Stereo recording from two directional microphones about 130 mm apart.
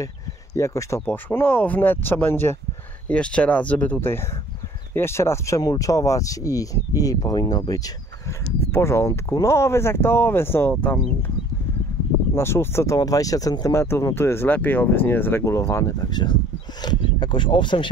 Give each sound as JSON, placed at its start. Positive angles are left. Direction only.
{"t": 0.6, "sound": "speech", "side_deg": 25}
{"t": 12.4, "sound": "speech", "side_deg": 20}